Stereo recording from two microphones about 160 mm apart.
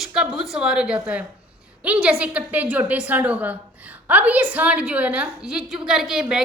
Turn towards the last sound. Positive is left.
turn(degrees=-5)  # may be behind; listen again after turning